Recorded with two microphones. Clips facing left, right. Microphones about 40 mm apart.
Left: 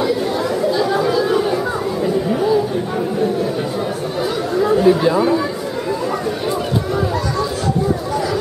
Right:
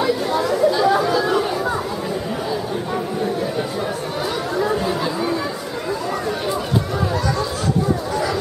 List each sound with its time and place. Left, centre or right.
0.0 s chatter: centre
4.8 s chatter: centre